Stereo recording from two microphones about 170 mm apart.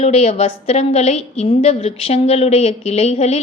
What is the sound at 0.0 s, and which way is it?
A woman's voice, 40° left (ahead or behind).